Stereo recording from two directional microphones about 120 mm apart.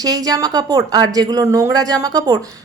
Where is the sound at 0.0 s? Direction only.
30° right (ahead or behind).